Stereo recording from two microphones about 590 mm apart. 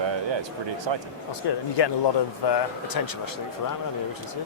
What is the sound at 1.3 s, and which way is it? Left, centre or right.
Speech, left.